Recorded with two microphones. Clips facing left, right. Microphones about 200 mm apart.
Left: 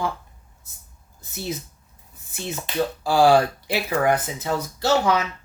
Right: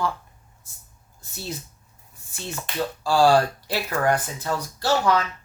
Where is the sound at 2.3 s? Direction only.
20° left (ahead or behind).